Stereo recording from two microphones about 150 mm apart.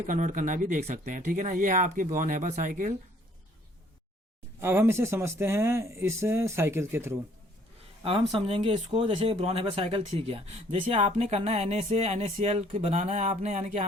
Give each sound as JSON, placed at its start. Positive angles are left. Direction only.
{"t": 0.1, "sound": "speech", "side_deg": -60}
{"t": 4.6, "sound": "speech", "side_deg": -15}
{"t": 8.0, "sound": "speech", "side_deg": -40}